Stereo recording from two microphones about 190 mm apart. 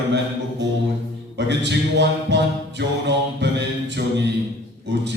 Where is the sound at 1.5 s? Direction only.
65° right (ahead or behind).